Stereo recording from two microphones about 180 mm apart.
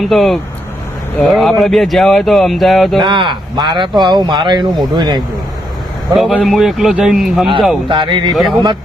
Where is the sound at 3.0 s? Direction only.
25° right (ahead or behind).